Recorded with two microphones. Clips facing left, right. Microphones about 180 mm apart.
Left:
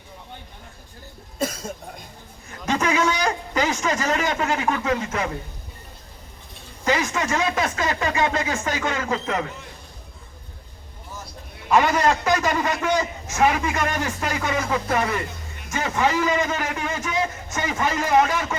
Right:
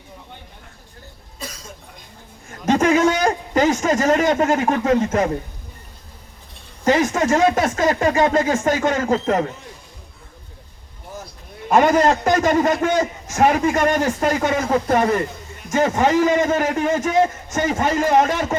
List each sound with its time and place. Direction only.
1.4 s cough: 50° left (ahead or behind)
2.5 s a sound: 45° right (ahead or behind)
6.8 s a man's voice: 45° right (ahead or behind)
11.7 s a man's voice: 45° right (ahead or behind)